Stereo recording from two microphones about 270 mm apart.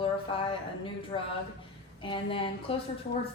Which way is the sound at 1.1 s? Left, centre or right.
Left.